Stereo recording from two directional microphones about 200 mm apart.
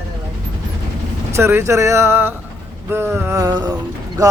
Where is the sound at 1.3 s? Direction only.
10° right (ahead or behind).